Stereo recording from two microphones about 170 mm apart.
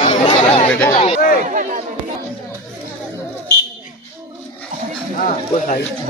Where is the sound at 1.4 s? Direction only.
50° right (ahead or behind).